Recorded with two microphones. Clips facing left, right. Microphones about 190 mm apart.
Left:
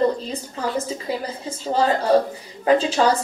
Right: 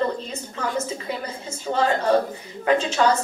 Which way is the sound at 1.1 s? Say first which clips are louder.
Left 3 dB; 35° left (ahead or behind).